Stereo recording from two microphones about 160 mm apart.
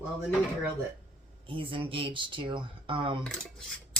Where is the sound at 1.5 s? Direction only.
30° right (ahead or behind).